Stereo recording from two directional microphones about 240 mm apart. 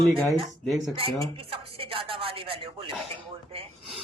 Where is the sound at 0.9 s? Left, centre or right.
Right.